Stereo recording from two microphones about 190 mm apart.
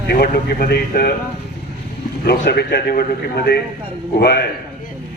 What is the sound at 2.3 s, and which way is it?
Speech, 55° left (ahead or behind).